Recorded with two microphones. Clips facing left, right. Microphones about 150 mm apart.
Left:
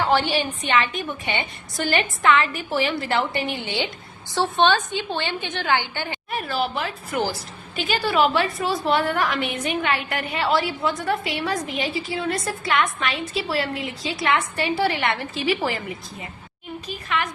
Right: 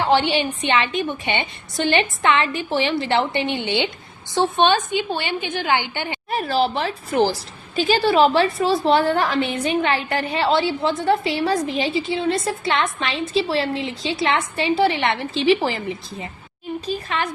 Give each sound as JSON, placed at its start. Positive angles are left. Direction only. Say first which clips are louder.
{"t": 0.1, "sound": "a woman's voice", "louder": "right 3 dB", "side_deg": -25}
{"t": 6.3, "sound": "a woman's voice", "louder": "right 5 dB", "side_deg": -35}